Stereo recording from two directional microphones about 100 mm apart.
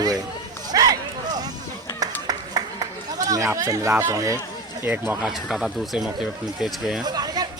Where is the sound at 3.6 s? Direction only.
35° right (ahead or behind).